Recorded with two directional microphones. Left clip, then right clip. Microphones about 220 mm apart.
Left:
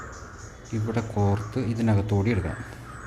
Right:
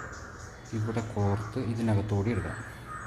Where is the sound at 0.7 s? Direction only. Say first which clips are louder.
Left 4 dB; 15° left (ahead or behind).